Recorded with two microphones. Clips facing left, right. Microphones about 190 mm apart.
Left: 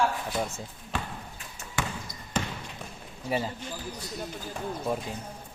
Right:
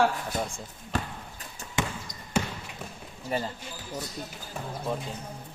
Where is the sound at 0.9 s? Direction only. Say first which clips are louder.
Right 3 dB; 40° right (ahead or behind).